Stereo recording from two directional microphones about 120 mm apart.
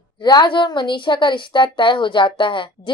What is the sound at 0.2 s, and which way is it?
A woman's voice, 40° left (ahead or behind).